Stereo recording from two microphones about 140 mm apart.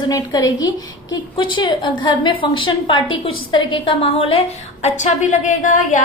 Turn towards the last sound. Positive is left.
turn(degrees=65)  # may be behind; listen again after turning